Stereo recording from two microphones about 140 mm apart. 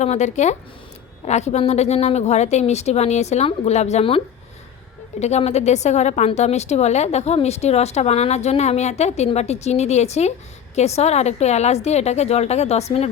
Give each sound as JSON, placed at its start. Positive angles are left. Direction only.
{"t": 0.0, "sound": "a woman's voice", "side_deg": 55}
{"t": 5.2, "sound": "a woman's voice", "side_deg": 50}